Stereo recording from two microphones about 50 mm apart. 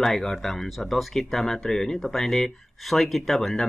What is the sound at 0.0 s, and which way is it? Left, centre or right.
Speech, centre.